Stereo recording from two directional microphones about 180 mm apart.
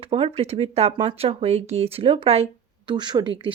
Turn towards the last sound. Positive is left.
turn(degrees=-25)  # may be behind; listen again after turning